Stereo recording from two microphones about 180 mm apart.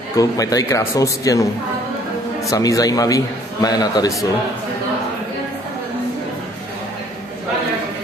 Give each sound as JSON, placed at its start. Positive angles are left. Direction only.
{"t": 0.1, "sound": "speech", "side_deg": 20}
{"t": 2.5, "sound": "speech", "side_deg": 20}